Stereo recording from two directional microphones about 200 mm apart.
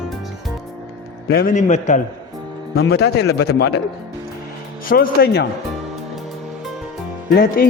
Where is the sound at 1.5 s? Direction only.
40° left (ahead or behind).